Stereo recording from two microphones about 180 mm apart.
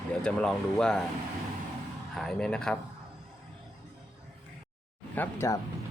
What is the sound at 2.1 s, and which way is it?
Speech, 5° left (ahead or behind).